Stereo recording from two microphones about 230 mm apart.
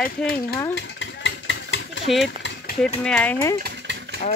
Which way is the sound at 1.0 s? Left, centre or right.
Left.